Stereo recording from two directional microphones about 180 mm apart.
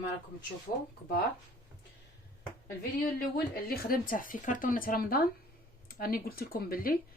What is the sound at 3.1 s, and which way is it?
Speech, 55° left (ahead or behind).